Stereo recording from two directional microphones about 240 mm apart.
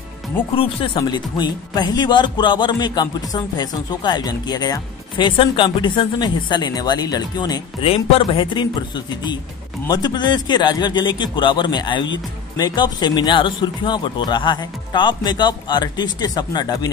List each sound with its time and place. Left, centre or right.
0.6 s speech: left